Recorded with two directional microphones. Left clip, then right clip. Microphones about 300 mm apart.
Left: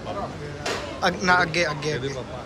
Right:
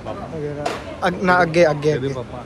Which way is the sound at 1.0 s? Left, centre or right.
Centre.